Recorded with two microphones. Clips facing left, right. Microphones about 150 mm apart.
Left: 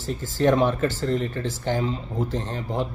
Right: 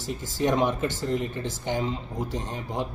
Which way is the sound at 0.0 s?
15° right (ahead or behind).